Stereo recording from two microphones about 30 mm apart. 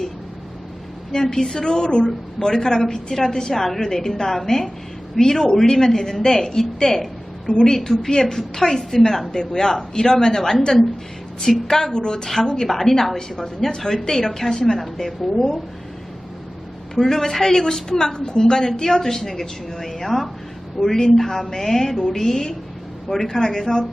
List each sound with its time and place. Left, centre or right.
1.1 s a man's voice: centre
3.5 s a woman's voice: centre
7.4 s a woman's voice: left
7.9 s a woman's voice: centre
9.3 s a man's voice: left
11.7 s a man's voice: left
12.6 s a woman's voice: centre
13.1 s a man's voice: left
16.9 s a woman's voice: centre